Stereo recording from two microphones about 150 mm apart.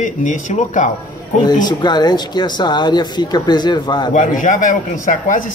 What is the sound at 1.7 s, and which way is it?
Speech, 30° left (ahead or behind).